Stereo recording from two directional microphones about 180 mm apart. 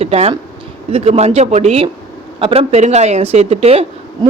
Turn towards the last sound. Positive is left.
turn(degrees=-35)  # may be behind; listen again after turning